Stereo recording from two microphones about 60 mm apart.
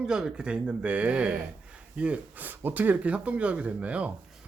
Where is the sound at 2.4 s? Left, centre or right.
Right.